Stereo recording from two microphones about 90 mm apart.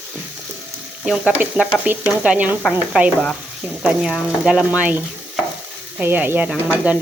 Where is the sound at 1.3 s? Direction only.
20° right (ahead or behind).